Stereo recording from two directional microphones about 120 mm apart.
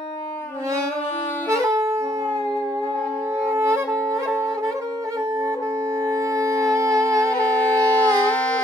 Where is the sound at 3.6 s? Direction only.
20° right (ahead or behind).